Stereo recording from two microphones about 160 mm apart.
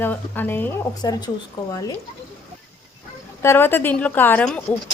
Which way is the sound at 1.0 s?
25° left (ahead or behind).